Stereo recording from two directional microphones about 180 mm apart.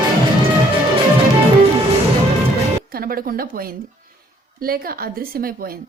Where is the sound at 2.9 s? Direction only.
55° right (ahead or behind).